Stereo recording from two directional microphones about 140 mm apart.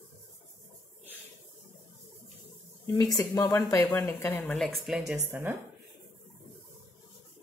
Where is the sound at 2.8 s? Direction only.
25° left (ahead or behind).